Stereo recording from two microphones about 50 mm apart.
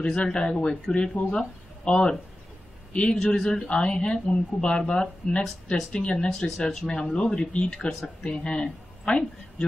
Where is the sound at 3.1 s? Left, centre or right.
Centre.